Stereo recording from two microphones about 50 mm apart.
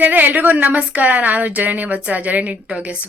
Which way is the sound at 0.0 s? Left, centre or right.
Right.